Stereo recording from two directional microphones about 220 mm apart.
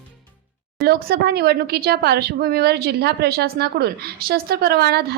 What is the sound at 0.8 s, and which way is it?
Speech, 45° right (ahead or behind).